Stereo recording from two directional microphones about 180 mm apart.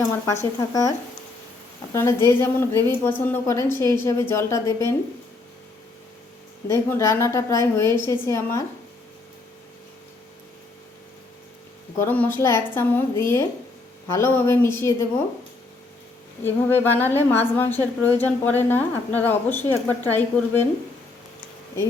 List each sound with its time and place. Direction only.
0.7 s a woman's voice: 20° left (ahead or behind)
6.7 s a woman's voice: 15° left (ahead or behind)
11.9 s a woman's voice: 10° left (ahead or behind)
16.4 s a woman's voice: 10° left (ahead or behind)